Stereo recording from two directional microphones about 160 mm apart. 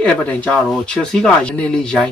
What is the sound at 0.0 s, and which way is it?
Speech, 10° left (ahead or behind).